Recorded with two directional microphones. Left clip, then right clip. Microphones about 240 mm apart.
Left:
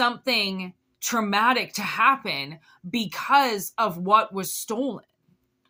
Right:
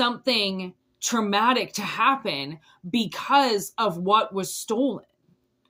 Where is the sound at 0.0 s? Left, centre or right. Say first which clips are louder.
Even; centre.